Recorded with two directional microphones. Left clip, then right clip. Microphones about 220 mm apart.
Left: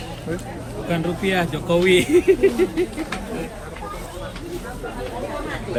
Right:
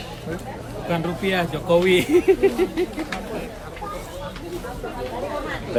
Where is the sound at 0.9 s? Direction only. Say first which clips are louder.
Left 1 dB; 30° right (ahead or behind).